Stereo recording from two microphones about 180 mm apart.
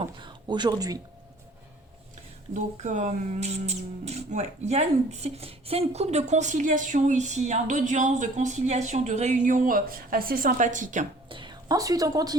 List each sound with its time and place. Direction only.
0.0 s speech: 25° right (ahead or behind)
2.5 s speech: 40° right (ahead or behind)
11.3 s a woman's voice: 25° right (ahead or behind)